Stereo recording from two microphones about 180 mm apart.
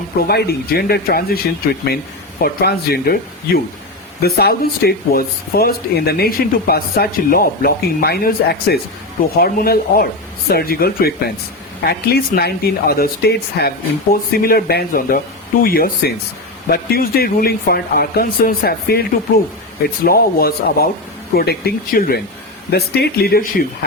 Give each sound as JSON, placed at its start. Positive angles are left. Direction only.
{"t": 0.2, "sound": "speech", "side_deg": 60}
{"t": 20.1, "sound": "speech", "side_deg": 55}